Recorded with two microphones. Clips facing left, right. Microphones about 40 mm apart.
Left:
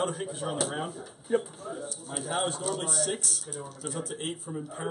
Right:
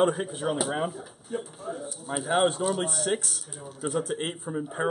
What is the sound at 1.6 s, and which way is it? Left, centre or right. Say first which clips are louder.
Speech: right 2 dB; centre.